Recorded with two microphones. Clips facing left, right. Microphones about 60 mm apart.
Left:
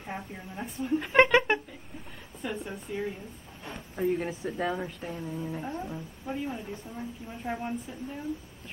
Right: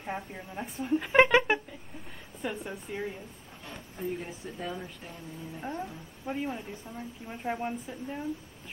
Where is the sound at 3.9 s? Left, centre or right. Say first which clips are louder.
Left 7 dB; left.